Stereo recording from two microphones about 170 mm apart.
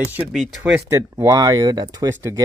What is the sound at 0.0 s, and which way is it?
Speech, 5° right (ahead or behind).